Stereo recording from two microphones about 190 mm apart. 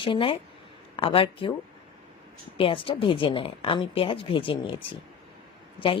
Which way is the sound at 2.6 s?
30° left (ahead or behind).